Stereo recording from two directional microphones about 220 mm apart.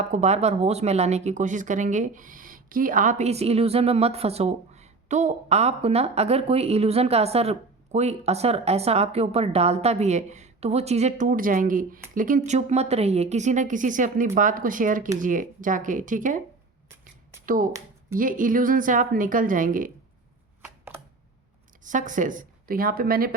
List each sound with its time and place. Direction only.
0.1 s a woman's voice: 30° right (ahead or behind)
17.4 s a woman's voice: 40° right (ahead or behind)
21.8 s a woman's voice: 35° right (ahead or behind)